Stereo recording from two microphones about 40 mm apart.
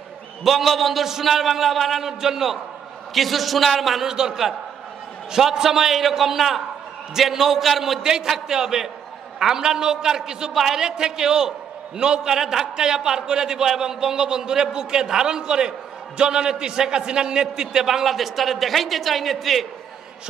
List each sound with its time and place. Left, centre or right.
0.4 s a man's voice: centre
4.1 s a man's voice: centre
8.0 s a man's voice: centre
10.5 s a man's voice: centre
10.8 s a man's voice: centre
18.0 s a man's voice: centre